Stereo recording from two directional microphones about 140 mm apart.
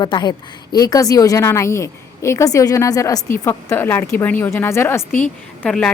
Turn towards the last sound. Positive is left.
turn(degrees=5)  # may be behind; listen again after turning